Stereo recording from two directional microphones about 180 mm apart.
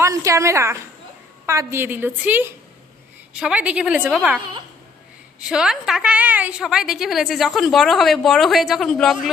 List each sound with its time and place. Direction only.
0.0 s a woman's voice: 15° right (ahead or behind)
5.4 s a woman's voice: 5° right (ahead or behind)